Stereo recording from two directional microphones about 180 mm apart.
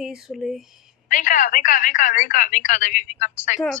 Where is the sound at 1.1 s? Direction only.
45° left (ahead or behind).